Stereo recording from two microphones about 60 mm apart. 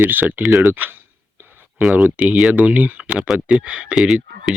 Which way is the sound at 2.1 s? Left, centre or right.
Right.